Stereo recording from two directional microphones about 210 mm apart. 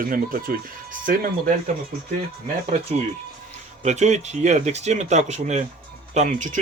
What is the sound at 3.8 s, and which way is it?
Speech, 35° right (ahead or behind).